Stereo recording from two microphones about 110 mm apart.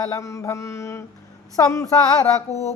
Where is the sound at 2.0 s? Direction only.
35° left (ahead or behind).